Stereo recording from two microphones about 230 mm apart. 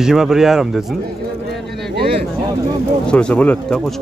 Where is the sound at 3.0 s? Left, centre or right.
Centre.